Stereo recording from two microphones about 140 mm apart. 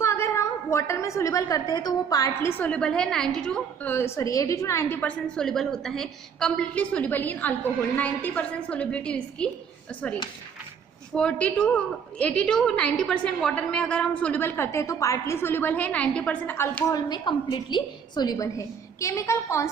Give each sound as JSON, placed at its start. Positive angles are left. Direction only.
{"t": 0.0, "sound": "a woman's voice", "side_deg": 20}
{"t": 11.1, "sound": "a woman's voice", "side_deg": 5}
{"t": 16.9, "sound": "a woman's voice", "side_deg": 30}